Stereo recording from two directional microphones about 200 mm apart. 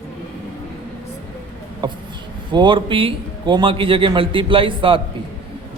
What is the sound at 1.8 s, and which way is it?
A man's voice, 25° right (ahead or behind).